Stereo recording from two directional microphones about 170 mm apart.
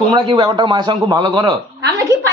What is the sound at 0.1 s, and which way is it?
Speech, 25° right (ahead or behind).